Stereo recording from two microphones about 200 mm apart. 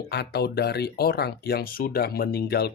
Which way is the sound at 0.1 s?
55° left (ahead or behind).